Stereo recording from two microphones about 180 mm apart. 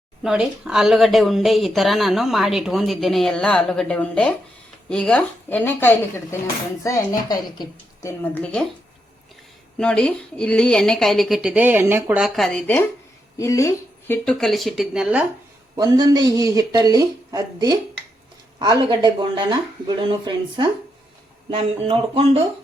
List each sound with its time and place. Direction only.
0.2 s speech: 5° right (ahead or behind); by 8.1 s 20° left (ahead or behind)
8.2 s speech: 10° left (ahead or behind)
9.7 s speech: 5° left (ahead or behind)
14.1 s speech: 5° left (ahead or behind)
15.7 s speech: 20° right (ahead or behind)